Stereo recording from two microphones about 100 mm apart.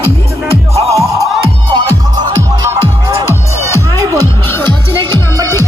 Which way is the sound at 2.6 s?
30° right (ahead or behind).